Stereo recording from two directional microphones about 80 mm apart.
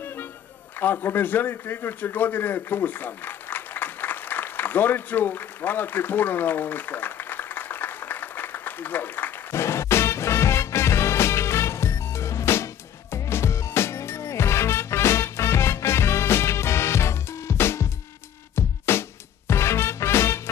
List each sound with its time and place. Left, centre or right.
0.0 s music: left
0.7 s a sound: left
9.6 s music: left